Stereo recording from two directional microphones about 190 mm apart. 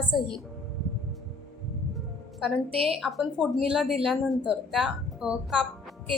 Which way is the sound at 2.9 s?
Centre (ahead or behind).